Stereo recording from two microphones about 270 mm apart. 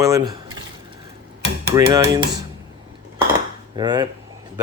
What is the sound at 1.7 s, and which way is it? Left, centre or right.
Speech, centre.